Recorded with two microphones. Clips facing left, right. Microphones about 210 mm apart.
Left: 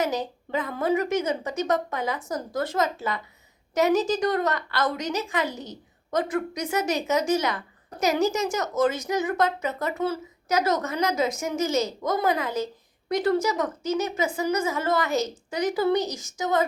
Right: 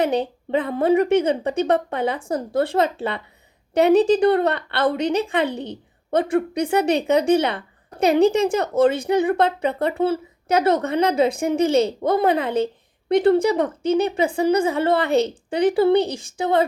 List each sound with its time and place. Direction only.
0.0 s a woman's voice: 30° right (ahead or behind)
5.5 s a woman's voice: 60° right (ahead or behind)
6.1 s a woman's voice: 30° right (ahead or behind)